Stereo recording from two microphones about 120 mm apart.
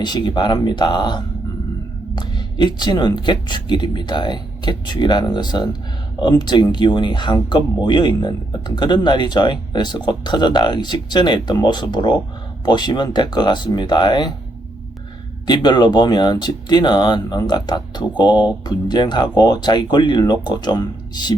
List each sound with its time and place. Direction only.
0.0 s speech: 35° left (ahead or behind)
15.4 s speech: 35° left (ahead or behind)